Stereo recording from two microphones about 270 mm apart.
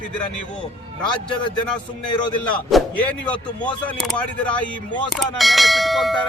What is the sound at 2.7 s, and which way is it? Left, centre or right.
Speech, centre.